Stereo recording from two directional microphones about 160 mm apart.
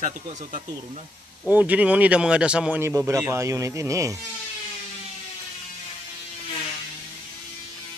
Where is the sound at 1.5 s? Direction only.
10° right (ahead or behind).